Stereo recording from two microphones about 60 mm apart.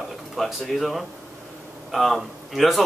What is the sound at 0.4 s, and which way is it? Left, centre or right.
A man's voice, centre.